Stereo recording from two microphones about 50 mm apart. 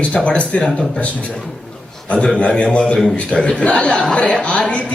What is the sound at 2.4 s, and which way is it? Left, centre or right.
A man's voice, left.